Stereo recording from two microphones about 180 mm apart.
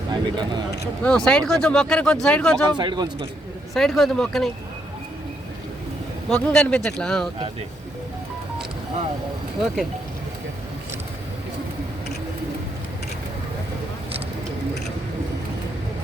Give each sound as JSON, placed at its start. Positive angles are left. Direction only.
{"t": 0.1, "sound": "speech", "side_deg": -25}
{"t": 1.0, "sound": "speech", "side_deg": 5}
{"t": 2.6, "sound": "speech", "side_deg": -25}
{"t": 3.8, "sound": "speech", "side_deg": 0}
{"t": 6.2, "sound": "speech", "side_deg": 5}